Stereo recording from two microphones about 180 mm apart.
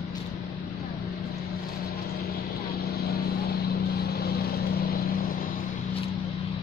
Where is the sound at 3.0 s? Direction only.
60° left (ahead or behind).